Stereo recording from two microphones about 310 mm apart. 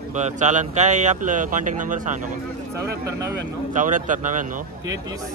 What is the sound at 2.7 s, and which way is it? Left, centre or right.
Speech, centre.